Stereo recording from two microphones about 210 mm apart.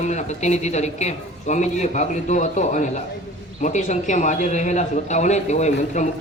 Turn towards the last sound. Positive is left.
turn(degrees=35)  # may be behind; listen again after turning